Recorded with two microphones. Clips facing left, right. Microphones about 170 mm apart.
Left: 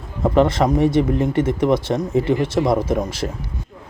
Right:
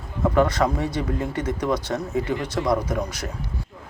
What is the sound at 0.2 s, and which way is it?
Speech, 25° left (ahead or behind).